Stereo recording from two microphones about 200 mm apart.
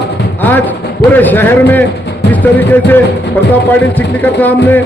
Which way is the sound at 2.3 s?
10° left (ahead or behind).